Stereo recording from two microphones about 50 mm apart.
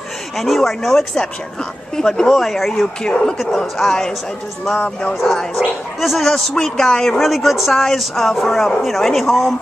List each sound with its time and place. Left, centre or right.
0.4 s speech: centre
3.0 s speech: centre
4.7 s speech: left
5.2 s speech: centre
6.2 s speech: centre